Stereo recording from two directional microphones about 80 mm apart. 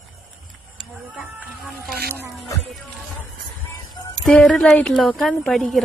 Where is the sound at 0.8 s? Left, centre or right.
Centre.